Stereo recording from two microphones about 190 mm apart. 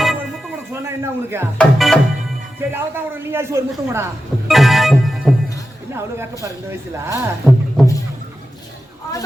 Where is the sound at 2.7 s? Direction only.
10° right (ahead or behind).